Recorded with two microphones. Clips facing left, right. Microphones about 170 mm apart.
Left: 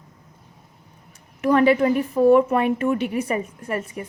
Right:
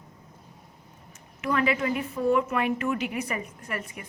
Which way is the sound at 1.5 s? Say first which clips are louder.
Left 9 dB; 40° left (ahead or behind).